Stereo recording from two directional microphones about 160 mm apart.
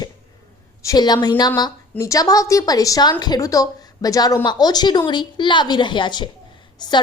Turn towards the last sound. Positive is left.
turn(degrees=25)  # may be behind; listen again after turning